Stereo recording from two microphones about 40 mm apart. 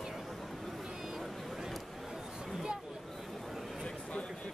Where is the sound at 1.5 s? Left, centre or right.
Centre.